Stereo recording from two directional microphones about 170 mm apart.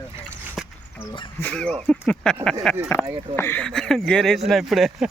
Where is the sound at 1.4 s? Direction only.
5° left (ahead or behind).